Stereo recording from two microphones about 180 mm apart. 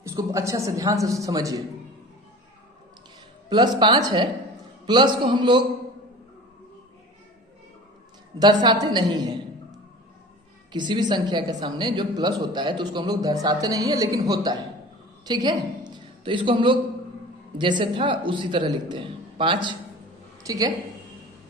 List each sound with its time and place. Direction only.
0.0 s a man's voice: 15° right (ahead or behind)
3.5 s a woman's voice: 25° right (ahead or behind)
8.4 s a woman's voice: 25° right (ahead or behind)
10.7 s a woman's voice: 25° right (ahead or behind)